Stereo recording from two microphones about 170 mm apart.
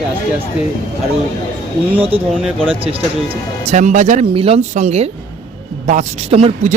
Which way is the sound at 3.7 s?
45° right (ahead or behind).